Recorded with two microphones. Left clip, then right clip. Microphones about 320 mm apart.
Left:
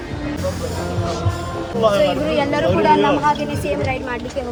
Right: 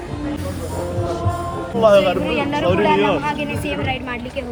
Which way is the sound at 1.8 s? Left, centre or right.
Right.